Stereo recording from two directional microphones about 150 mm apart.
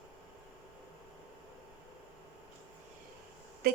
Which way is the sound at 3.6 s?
90° right.